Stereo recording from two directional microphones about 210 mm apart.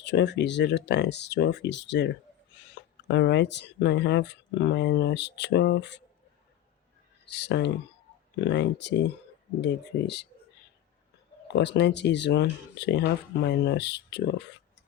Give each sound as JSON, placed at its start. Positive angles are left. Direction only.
{"t": 0.0, "sound": "speech", "side_deg": 55}
{"t": 7.3, "sound": "speech", "side_deg": 55}
{"t": 11.4, "sound": "speech", "side_deg": 55}